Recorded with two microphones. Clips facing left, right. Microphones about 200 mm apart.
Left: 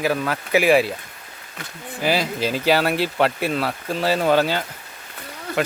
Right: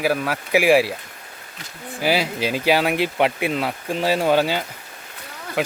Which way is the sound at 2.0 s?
10° right (ahead or behind).